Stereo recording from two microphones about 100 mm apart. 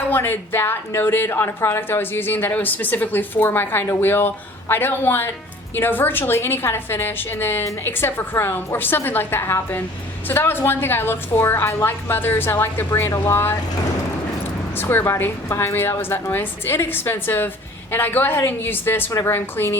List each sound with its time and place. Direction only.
0.1 s a woman's voice: 20° left (ahead or behind)
14.8 s a woman's voice: 20° left (ahead or behind)